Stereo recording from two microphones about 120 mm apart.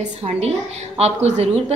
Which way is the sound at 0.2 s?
60° right (ahead or behind).